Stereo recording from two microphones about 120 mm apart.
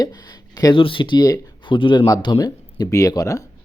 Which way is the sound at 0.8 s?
45° left (ahead or behind).